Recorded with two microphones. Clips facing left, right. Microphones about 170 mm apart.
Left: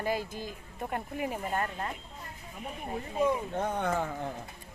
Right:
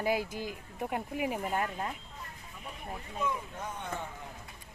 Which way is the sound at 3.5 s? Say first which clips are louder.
Left 9 dB; 65° left (ahead or behind).